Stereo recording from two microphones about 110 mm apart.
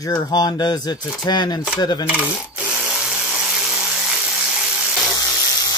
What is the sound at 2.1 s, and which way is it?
Tools, 15° right (ahead or behind).